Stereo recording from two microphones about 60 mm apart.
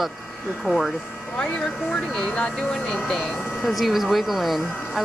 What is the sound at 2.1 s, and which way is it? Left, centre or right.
Speech, centre.